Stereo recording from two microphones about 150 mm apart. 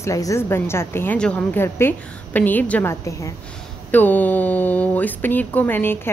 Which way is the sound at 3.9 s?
10° left (ahead or behind).